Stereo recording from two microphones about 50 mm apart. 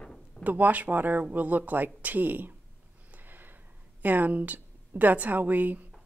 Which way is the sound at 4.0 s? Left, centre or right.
Right.